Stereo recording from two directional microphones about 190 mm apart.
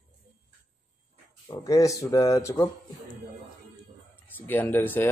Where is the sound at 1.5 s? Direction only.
15° left (ahead or behind).